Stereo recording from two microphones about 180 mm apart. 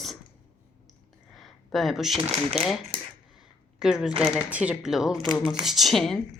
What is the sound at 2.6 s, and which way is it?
Speech, 35° right (ahead or behind).